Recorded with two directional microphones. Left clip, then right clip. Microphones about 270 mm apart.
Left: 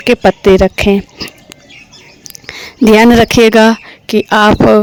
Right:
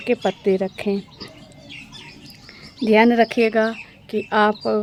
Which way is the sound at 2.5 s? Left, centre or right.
Left.